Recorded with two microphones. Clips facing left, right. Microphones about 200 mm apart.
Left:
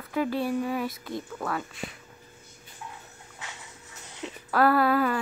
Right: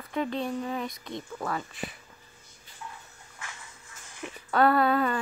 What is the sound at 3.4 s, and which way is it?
Music, 20° left (ahead or behind).